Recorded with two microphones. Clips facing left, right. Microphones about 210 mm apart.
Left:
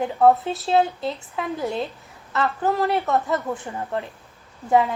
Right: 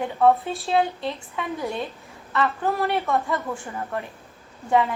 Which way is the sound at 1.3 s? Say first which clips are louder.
Left 3 dB; 25° left (ahead or behind).